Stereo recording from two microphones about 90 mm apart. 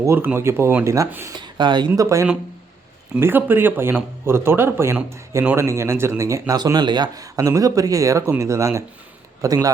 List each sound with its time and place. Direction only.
0.0 s a man's voice: 30° right (ahead or behind)
1.4 s speech: 60° right (ahead or behind)
2.0 s speech: 35° right (ahead or behind)
3.2 s a man's voice: 25° right (ahead or behind)
6.5 s speech: 45° right (ahead or behind)